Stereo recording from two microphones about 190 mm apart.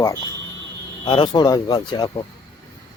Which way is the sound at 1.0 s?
25° left (ahead or behind).